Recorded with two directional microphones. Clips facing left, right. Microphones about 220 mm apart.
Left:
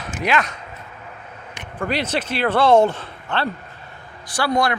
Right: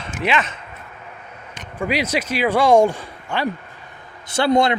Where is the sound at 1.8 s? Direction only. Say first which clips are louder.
Right 1 dB; 10° right (ahead or behind).